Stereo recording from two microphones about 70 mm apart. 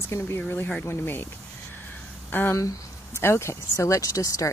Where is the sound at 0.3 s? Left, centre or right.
Left.